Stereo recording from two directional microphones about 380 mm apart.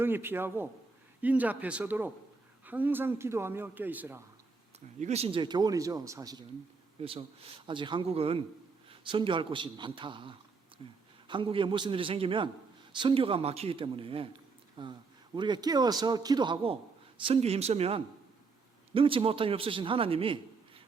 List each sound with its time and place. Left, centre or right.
0.0 s speech: centre
4.9 s a man's voice: centre